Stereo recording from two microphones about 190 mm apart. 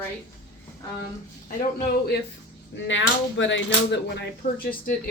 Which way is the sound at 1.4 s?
55° left (ahead or behind).